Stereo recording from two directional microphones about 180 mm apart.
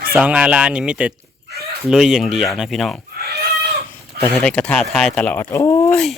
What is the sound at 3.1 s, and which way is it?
Livestock, 60° right (ahead or behind).